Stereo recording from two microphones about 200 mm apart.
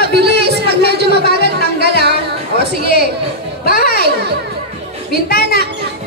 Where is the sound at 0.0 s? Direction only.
55° right (ahead or behind).